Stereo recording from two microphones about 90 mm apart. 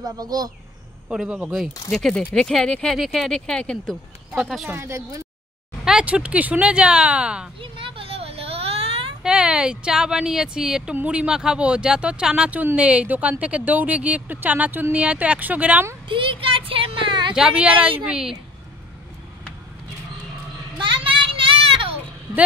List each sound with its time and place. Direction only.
0.0 s speech: 45° right (ahead or behind)
1.0 s speech: 10° right (ahead or behind)
1.9 s speech: 5° left (ahead or behind)
4.6 s speech: 30° right (ahead or behind)
5.9 s speech: 10° right (ahead or behind)
7.6 s a sound: 80° right
9.2 s speech: 10° right (ahead or behind)
16.1 s speech: 70° right (ahead or behind)
17.4 s speech: 15° right (ahead or behind)
18.1 s speech: 5° right (ahead or behind)
20.8 s a sound: 70° right (ahead or behind); by 21.8 s 90° right